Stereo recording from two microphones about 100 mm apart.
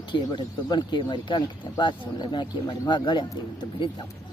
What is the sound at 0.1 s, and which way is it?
Speech, 50° left (ahead or behind).